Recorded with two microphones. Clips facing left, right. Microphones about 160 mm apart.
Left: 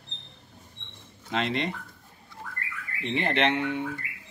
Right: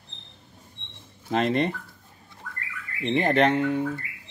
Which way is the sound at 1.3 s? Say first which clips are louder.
Right 5 dB; 45° right (ahead or behind).